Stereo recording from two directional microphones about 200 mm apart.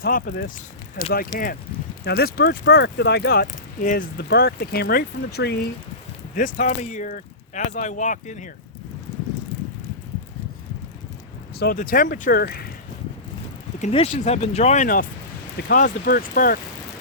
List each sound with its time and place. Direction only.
0.0 s speech: 45° left (ahead or behind)
3.4 s speech: 40° left (ahead or behind)
6.3 s speech: 40° left (ahead or behind)
11.6 s speech: 45° left (ahead or behind)
13.7 s speech: 35° left (ahead or behind)